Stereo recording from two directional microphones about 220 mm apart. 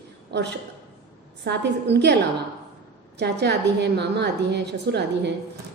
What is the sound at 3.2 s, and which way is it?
A woman's voice, 50° right (ahead or behind).